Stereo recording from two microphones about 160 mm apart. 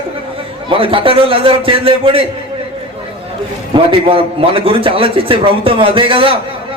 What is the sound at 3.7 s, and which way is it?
A man's voice, 30° right (ahead or behind).